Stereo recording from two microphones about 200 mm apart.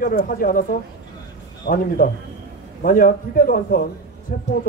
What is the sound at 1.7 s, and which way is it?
Speech, 45° left (ahead or behind).